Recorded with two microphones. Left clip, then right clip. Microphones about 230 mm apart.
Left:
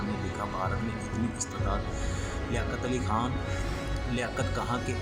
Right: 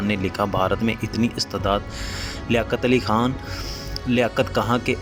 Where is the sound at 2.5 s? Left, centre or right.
Right.